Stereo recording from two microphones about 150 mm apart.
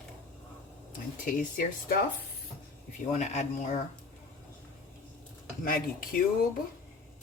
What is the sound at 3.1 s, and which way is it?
Speech, 50° left (ahead or behind).